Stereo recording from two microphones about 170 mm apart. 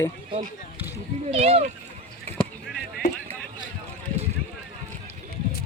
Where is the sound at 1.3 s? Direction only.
35° right (ahead or behind).